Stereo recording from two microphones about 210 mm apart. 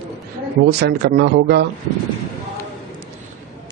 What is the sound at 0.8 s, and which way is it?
Speech, 50° right (ahead or behind).